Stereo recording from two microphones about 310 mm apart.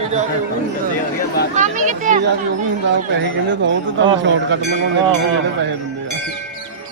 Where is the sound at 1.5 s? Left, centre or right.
Right.